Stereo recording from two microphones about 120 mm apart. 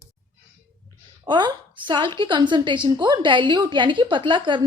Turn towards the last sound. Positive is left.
turn(degrees=-40)  # may be behind; listen again after turning